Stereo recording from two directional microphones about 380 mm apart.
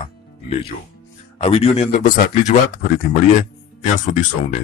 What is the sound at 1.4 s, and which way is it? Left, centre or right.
Speech, centre.